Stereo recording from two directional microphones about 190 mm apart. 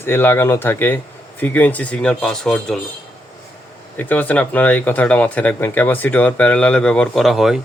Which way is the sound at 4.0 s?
10° left (ahead or behind).